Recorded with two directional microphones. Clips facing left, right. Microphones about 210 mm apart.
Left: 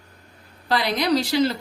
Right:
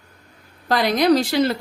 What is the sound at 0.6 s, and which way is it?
Speech, 45° right (ahead or behind).